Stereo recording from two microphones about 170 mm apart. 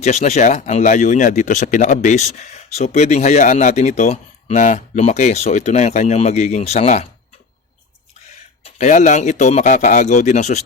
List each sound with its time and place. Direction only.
0.0 s speech: 40° left (ahead or behind)
8.6 s speech: 45° left (ahead or behind)